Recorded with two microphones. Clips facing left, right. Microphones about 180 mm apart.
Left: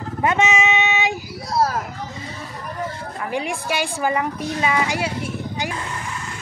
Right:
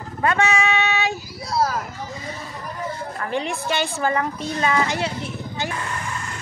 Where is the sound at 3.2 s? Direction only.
10° left (ahead or behind).